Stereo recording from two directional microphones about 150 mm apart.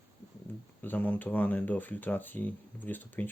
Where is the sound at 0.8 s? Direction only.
10° left (ahead or behind).